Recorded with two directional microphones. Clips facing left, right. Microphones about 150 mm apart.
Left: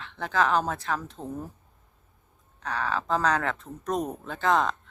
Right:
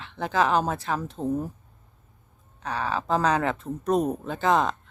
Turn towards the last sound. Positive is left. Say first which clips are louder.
# right 2 dB
turn(degrees=-5)  # may be behind; listen again after turning